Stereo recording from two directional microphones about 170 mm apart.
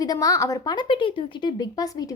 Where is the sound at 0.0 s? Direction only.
20° left (ahead or behind).